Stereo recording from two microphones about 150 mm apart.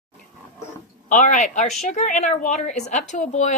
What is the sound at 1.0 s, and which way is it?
Speech, 55° left (ahead or behind).